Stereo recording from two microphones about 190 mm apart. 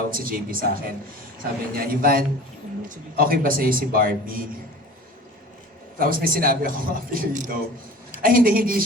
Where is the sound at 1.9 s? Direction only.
50° right (ahead or behind).